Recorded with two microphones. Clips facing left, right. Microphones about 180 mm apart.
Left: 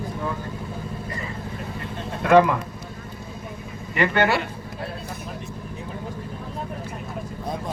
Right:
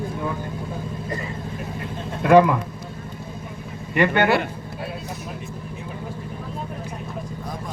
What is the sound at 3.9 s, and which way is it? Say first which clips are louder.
Speech: right 2 dB; 20° right (ahead or behind).